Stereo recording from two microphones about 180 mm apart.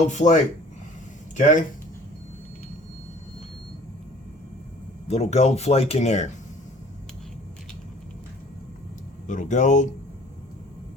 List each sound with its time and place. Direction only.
0.1 s speech: 40° left (ahead or behind)
1.4 s speech: 45° left (ahead or behind)
5.0 s speech: 40° left (ahead or behind)
9.2 s speech: 45° left (ahead or behind)